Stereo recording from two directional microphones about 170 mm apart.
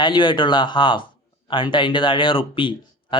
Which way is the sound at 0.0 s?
25° left (ahead or behind).